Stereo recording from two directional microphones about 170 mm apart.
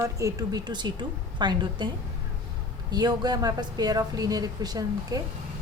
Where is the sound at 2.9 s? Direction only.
25° right (ahead or behind).